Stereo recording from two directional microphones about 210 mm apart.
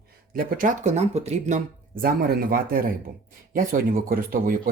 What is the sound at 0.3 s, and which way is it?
Speech, 40° right (ahead or behind).